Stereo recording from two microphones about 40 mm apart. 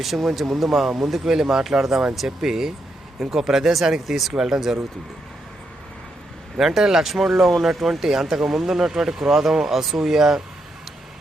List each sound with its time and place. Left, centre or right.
0.0 s speech: centre
6.6 s speech: centre